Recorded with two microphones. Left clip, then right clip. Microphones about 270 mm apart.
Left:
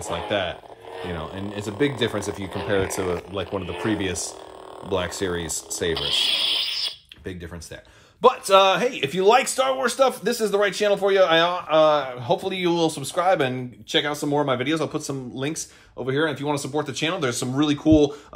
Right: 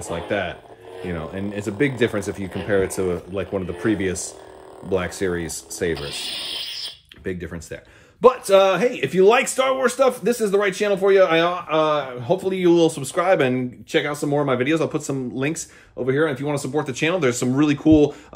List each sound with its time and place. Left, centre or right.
0.0 s speech: left